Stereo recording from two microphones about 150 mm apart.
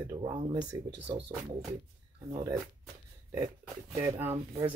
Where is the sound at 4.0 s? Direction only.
15° right (ahead or behind).